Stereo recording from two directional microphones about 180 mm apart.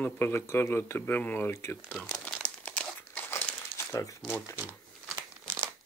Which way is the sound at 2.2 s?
5° left (ahead or behind).